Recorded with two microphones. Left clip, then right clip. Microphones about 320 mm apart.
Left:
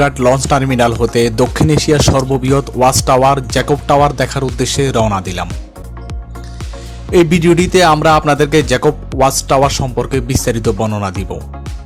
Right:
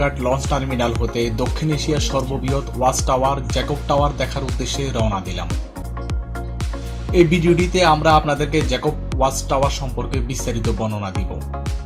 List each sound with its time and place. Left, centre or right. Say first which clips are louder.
0.0 s speech: left 9 dB; left
7.1 s speech: left 5 dB; left